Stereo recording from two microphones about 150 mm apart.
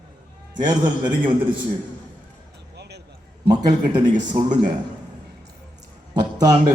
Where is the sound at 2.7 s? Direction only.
90° right.